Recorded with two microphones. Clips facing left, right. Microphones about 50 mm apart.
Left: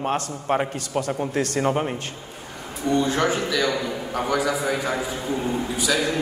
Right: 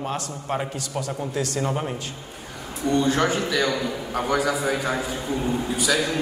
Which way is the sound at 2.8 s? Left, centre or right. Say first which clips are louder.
Even; left.